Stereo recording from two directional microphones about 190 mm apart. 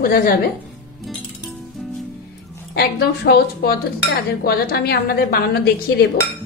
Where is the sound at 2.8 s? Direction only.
60° left (ahead or behind).